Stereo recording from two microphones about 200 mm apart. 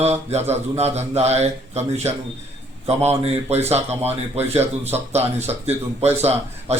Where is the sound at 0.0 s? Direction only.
35° right (ahead or behind).